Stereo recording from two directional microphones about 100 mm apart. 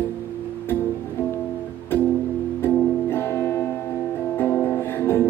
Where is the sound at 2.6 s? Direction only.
25° left (ahead or behind).